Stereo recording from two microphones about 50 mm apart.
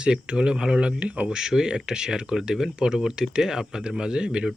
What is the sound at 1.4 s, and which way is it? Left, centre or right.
Speech, centre.